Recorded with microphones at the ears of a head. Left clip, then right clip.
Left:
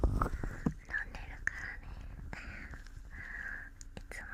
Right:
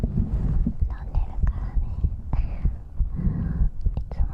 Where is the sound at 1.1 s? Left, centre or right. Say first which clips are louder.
Left 2 dB; right.